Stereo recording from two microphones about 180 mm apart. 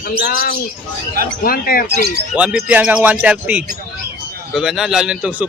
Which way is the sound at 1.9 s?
60° right (ahead or behind).